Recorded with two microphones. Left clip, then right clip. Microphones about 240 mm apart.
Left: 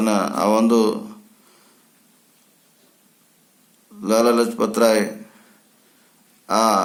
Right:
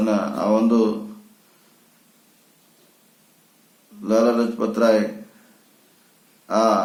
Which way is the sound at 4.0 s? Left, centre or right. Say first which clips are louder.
Left 2 dB; left.